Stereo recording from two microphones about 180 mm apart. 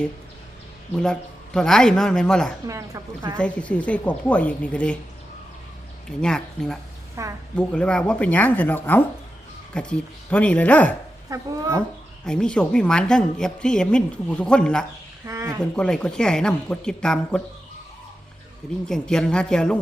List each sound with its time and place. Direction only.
0.9 s a woman's voice: 5° left (ahead or behind)
2.6 s a woman's voice: 15° right (ahead or behind)
3.3 s a woman's voice: 5° left (ahead or behind)
6.1 s a woman's voice: 5° left (ahead or behind)
7.2 s a woman's voice: 15° right (ahead or behind)
7.5 s a woman's voice: 5° left (ahead or behind)
12.2 s a woman's voice: 5° left (ahead or behind)
15.3 s a woman's voice: 15° right (ahead or behind)
15.7 s a woman's voice: 5° left (ahead or behind)
18.9 s a woman's voice: 5° left (ahead or behind)